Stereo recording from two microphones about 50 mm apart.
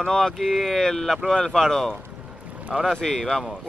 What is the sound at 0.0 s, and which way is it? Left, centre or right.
Speech, centre.